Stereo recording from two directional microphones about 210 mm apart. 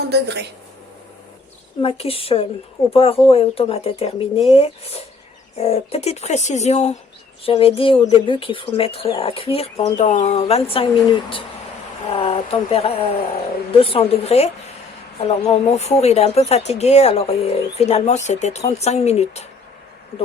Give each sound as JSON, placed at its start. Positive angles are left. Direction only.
{"t": 0.1, "sound": "a woman's voice", "side_deg": -55}
{"t": 1.8, "sound": "speech", "side_deg": 30}
{"t": 12.0, "sound": "speech", "side_deg": 25}